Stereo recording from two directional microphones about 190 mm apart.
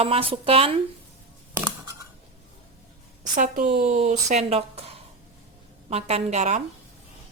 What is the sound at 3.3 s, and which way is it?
Speech, 45° right (ahead or behind).